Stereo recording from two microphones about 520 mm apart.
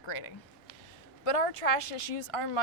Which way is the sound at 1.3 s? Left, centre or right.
Left.